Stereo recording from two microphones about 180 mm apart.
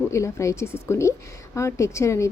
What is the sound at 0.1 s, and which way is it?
Speech, 15° left (ahead or behind).